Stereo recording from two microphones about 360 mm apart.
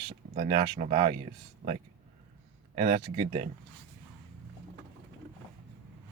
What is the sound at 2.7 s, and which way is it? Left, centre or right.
Speech, centre.